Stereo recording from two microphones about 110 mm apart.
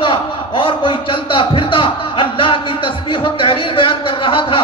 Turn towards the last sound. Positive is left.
turn(degrees=50)  # may be behind; listen again after turning